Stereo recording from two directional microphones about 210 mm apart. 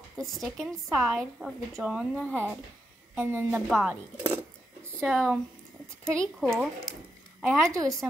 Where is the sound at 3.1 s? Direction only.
10° right (ahead or behind).